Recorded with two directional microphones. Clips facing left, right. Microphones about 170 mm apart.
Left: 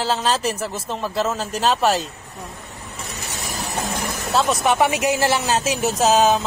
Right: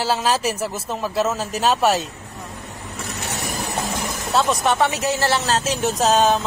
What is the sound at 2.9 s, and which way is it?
Vehicle, 70° right (ahead or behind).